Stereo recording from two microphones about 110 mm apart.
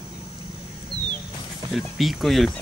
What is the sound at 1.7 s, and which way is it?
Speech, centre (ahead or behind).